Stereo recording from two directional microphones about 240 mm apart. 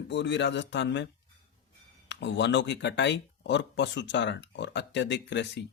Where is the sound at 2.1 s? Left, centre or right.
Left.